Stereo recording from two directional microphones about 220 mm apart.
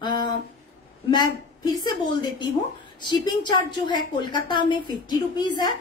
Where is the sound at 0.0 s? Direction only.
20° left (ahead or behind).